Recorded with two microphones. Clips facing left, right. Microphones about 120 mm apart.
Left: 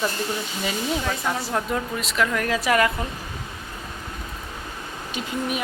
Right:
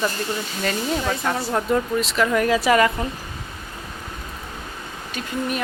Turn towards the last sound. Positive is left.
turn(degrees=10)  # may be behind; listen again after turning